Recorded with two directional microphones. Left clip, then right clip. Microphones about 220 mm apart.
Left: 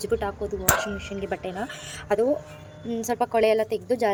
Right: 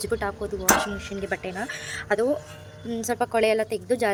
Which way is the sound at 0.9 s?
35° right (ahead or behind).